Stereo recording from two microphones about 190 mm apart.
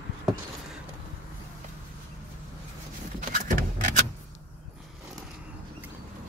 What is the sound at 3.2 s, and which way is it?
Vehicle, 45° right (ahead or behind).